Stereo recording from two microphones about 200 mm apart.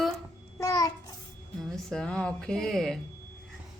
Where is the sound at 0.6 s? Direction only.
15° left (ahead or behind).